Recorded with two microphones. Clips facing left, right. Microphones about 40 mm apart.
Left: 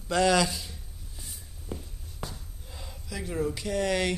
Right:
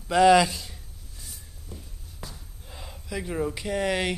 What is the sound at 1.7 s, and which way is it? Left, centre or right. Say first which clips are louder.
Walk: left 6 dB; left.